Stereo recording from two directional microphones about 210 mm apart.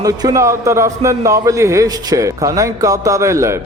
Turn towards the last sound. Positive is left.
turn(degrees=-15)  # may be behind; listen again after turning